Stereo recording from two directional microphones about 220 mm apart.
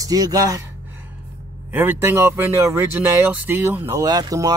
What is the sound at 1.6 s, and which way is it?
Speech, 10° right (ahead or behind).